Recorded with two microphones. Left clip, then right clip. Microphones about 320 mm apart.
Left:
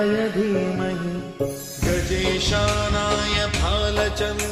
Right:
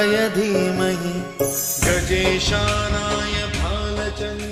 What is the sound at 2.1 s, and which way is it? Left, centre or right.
Music, centre.